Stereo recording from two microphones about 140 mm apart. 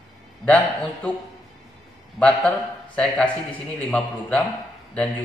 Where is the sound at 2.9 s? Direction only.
10° left (ahead or behind).